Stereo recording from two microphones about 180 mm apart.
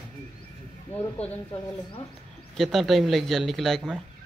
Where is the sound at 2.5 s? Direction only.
Centre (ahead or behind).